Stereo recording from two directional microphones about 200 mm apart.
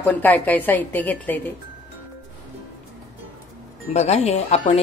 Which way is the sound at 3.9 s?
35° left (ahead or behind).